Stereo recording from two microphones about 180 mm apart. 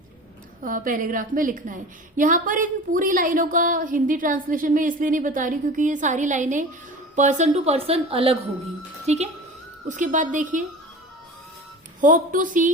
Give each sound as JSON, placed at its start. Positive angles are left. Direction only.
{"t": 0.6, "sound": "a woman's voice", "side_deg": -50}
{"t": 11.9, "sound": "a woman's voice", "side_deg": -50}